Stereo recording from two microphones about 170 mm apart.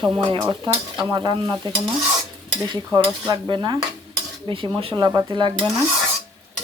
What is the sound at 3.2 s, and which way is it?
Speech, 25° right (ahead or behind).